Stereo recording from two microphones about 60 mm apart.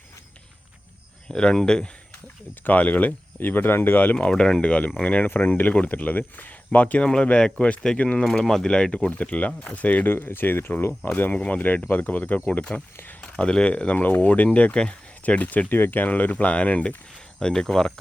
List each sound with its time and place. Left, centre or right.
1.3 s speech: centre
2.6 s speech: left
4.3 s speech: centre; by 7.0 s left
7.0 s speech: centre
8.2 s speech: centre; by 11.1 s left
11.1 s speech: left
17.2 s speech: centre